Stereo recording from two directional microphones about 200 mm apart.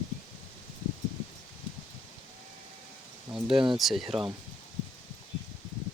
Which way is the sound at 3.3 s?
5° right (ahead or behind).